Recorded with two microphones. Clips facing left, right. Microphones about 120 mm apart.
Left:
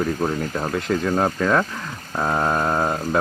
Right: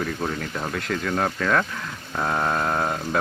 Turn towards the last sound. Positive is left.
turn(degrees=15)  # may be behind; listen again after turning